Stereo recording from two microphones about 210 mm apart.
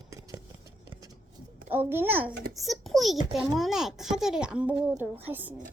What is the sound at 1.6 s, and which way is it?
A child's voice, 10° right (ahead or behind).